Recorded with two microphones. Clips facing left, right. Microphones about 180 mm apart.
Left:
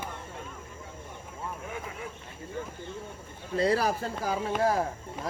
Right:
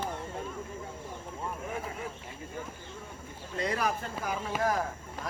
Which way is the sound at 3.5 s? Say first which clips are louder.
Left 5 dB; 35° left (ahead or behind).